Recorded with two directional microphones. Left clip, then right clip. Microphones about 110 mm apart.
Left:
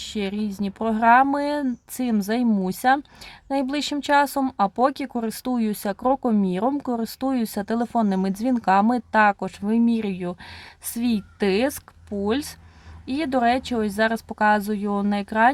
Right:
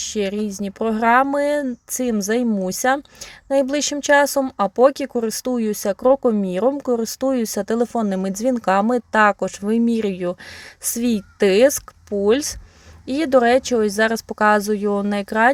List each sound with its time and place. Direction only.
0.2 s speech: 25° right (ahead or behind)